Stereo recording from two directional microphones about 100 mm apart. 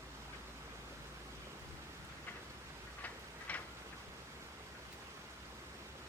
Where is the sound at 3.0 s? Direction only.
15° left (ahead or behind).